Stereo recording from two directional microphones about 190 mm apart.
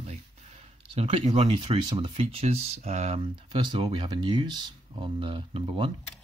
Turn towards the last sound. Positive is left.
turn(degrees=-30)  # may be behind; listen again after turning